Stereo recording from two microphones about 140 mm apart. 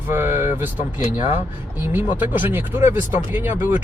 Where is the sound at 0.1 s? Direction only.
15° right (ahead or behind).